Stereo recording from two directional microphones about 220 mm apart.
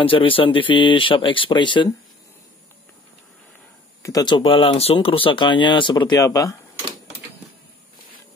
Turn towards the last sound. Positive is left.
turn(degrees=15)  # may be behind; listen again after turning